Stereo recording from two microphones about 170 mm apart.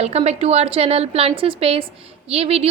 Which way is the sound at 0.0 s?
40° right (ahead or behind).